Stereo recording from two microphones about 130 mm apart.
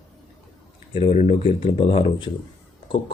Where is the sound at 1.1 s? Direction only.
65° left (ahead or behind).